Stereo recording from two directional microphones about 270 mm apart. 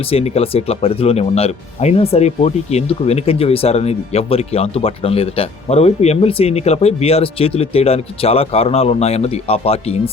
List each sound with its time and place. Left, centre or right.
0.0 s speech: left